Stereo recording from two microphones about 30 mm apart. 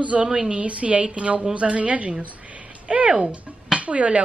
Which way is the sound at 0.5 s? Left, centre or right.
Right.